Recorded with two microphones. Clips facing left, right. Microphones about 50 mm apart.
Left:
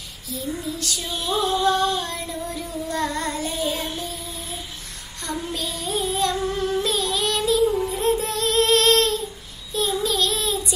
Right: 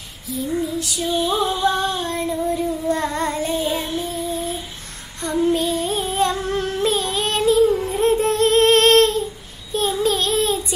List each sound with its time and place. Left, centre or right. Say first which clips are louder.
0.7 s female singing: right 7 dB; centre
1.6 s child singing: even; right
5.2 s music: right 10 dB; right
9.7 s child singing: right 4 dB; right